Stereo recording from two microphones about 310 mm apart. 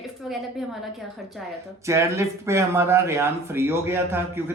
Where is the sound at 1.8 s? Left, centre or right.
Centre.